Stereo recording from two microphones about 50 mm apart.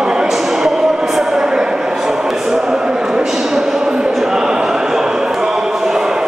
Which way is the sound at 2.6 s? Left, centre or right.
Centre.